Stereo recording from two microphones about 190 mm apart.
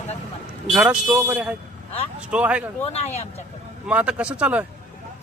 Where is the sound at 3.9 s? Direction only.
5° right (ahead or behind).